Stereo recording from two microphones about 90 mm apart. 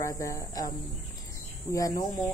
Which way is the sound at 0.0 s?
40° left (ahead or behind).